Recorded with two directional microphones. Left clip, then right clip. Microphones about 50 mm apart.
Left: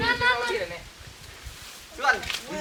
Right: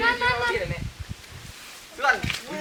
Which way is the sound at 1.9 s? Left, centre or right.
Centre.